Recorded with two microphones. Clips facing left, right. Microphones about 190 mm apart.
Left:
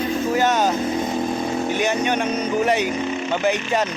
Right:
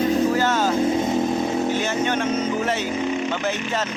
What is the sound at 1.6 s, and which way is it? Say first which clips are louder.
Speech: left 1 dB; 15° left (ahead or behind).